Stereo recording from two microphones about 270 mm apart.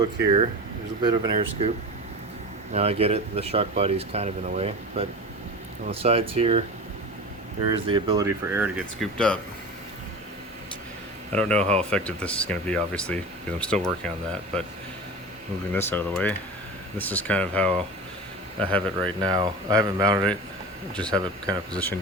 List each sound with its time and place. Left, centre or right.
1.0 s speech: centre
2.7 s speech: right
7.7 s speech: centre
11.3 s speech: centre
11.6 s speech: right
11.9 s speech: centre
15.7 s speech: centre
19.2 s speech: centre
20.9 s speech: centre